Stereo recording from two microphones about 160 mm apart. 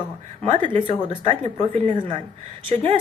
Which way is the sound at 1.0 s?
40° right (ahead or behind).